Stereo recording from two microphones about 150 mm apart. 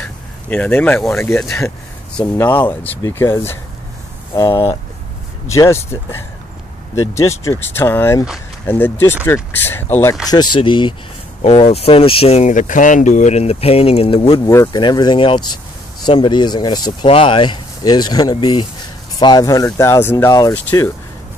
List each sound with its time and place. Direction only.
0.0 s a sound: 10° left (ahead or behind)
1.1 s speech: 15° left (ahead or behind)
2.6 s speech: 10° left (ahead or behind)
4.3 s speech: 25° left (ahead or behind)
5.5 s speech: 20° left (ahead or behind)
7.0 s speech: 20° left (ahead or behind)
10.3 s speech: 30° left (ahead or behind)
14.4 s speech: 20° left (ahead or behind)